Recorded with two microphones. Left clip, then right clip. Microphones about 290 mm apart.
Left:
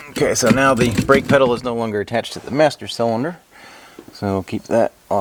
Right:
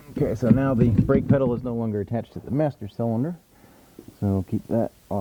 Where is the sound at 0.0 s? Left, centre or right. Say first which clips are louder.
Left 9 dB; centre.